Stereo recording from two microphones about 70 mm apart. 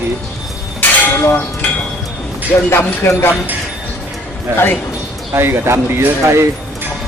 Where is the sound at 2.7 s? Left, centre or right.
Left.